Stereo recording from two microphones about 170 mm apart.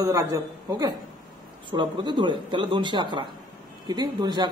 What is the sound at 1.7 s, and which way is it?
Speech, 25° right (ahead or behind).